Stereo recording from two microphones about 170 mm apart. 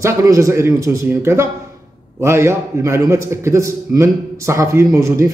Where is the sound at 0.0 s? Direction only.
20° right (ahead or behind).